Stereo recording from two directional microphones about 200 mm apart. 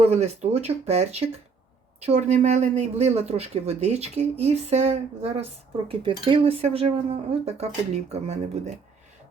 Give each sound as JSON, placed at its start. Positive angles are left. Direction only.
{"t": 0.0, "sound": "speech", "side_deg": -30}